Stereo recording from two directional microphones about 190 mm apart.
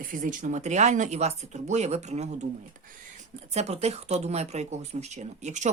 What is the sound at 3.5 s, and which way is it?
A woman's voice, 35° right (ahead or behind).